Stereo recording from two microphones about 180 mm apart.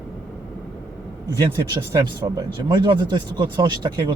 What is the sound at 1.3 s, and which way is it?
Speech, 20° right (ahead or behind).